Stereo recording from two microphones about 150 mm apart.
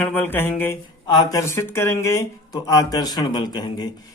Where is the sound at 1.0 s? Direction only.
25° left (ahead or behind).